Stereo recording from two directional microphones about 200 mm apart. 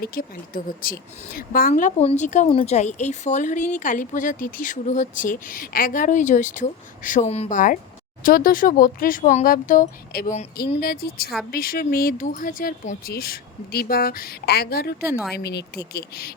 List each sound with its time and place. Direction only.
0.0 s a woman's voice: 45° left (ahead or behind)
15.1 s speech: centre (ahead or behind)
15.4 s speech: 55° left (ahead or behind)